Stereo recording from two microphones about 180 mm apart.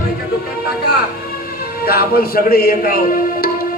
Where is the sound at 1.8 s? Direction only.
60° left (ahead or behind).